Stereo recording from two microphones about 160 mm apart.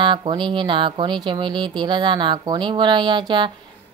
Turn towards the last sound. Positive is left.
turn(degrees=-30)  # may be behind; listen again after turning